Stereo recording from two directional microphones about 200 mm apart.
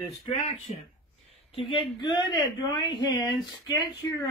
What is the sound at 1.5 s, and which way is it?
Speech, 20° left (ahead or behind).